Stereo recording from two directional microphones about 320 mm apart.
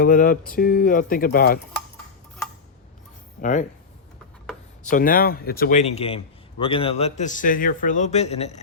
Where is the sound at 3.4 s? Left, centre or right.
Left.